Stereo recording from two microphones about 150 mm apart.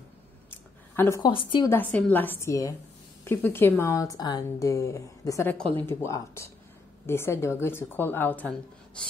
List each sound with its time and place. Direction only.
0.5 s a sound: 15° left (ahead or behind)
1.2 s a woman's voice: 35° left (ahead or behind)
1.7 s a woman's voice: 10° left (ahead or behind)